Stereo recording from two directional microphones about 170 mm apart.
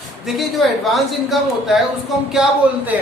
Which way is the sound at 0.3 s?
Centre (ahead or behind).